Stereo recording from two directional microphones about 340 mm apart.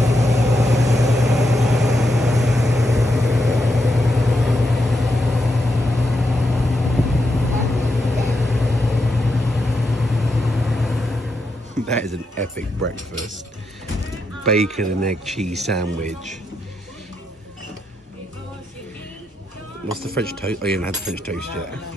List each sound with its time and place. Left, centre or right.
0.0 s vehicle: centre
12.4 s speech: right
14.6 s speech: centre
15.8 s speech: right
20.2 s speech: centre